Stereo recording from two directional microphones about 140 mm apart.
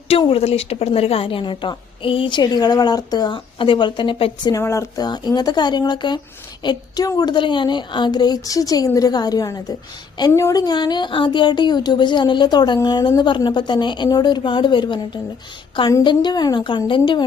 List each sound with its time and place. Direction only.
0.1 s speech: 40° left (ahead or behind)
4.5 s a woman's voice: 20° left (ahead or behind); by 17.2 s 35° left (ahead or behind)